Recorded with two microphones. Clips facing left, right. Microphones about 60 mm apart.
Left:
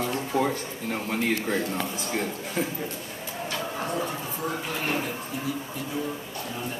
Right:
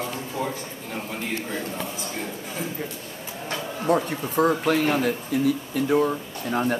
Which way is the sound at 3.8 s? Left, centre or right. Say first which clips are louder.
Right 7 dB; right.